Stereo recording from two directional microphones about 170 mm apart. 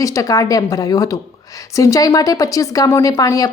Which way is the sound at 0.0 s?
20° left (ahead or behind).